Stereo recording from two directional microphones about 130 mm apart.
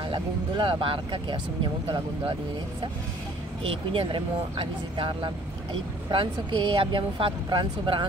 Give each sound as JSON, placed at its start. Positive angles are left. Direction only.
{"t": 0.1, "sound": "speech", "side_deg": -40}
{"t": 3.6, "sound": "speech", "side_deg": -45}